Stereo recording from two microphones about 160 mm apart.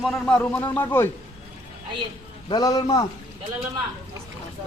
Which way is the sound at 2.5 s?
25° left (ahead or behind).